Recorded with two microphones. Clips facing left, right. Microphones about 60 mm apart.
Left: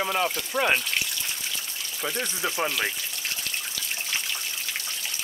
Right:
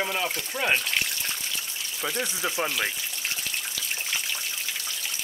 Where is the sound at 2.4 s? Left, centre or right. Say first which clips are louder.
Left 1 dB; centre.